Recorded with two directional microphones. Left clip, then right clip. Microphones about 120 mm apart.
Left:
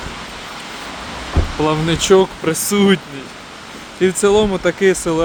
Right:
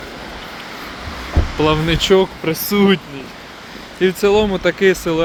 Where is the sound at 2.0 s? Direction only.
50° left (ahead or behind).